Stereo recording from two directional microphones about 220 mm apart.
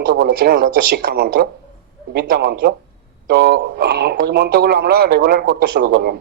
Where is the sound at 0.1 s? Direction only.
50° right (ahead or behind).